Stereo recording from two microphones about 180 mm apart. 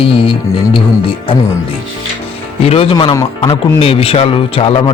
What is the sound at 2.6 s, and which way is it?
Speech, 30° left (ahead or behind).